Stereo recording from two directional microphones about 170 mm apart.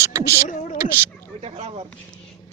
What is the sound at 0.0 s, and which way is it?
Beatboxing, 15° right (ahead or behind).